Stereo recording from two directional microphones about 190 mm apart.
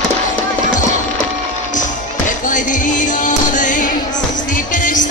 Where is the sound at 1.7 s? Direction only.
45° left (ahead or behind).